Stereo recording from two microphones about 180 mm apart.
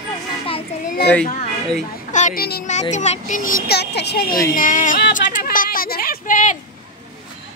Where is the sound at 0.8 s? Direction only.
60° left (ahead or behind).